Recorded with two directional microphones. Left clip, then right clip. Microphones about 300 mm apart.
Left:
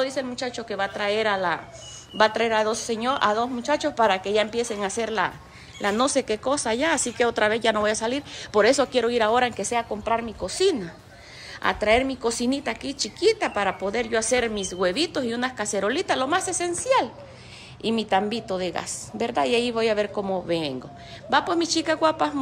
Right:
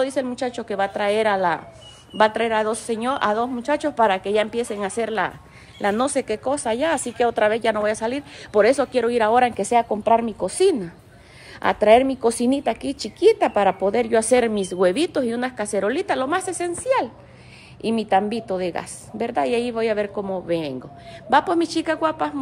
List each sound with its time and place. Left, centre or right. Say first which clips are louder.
0.0 s a woman's voice: right 4 dB; centre